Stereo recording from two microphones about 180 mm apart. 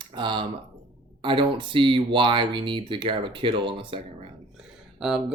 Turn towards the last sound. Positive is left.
turn(degrees=-5)  # may be behind; listen again after turning